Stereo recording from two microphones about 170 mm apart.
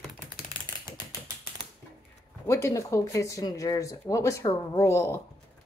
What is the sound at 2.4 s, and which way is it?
A woman's voice, 15° left (ahead or behind).